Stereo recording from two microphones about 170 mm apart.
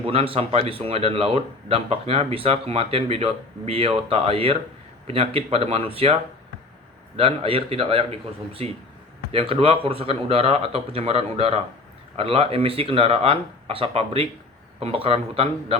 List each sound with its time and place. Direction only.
0.0 s speech: 35° right (ahead or behind)
7.2 s speech: 35° right (ahead or behind)
9.3 s speech: 35° right (ahead or behind)